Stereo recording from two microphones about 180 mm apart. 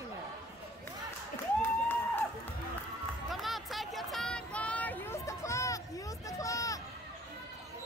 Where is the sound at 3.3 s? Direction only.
Centre (ahead or behind); by 6.8 s 20° left (ahead or behind).